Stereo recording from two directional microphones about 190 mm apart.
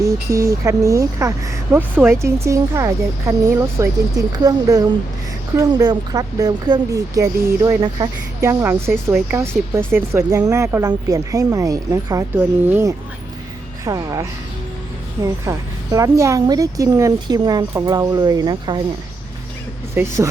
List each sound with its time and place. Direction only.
0.0 s a woman's voice: 15° right (ahead or behind)
19.9 s speech: 15° right (ahead or behind)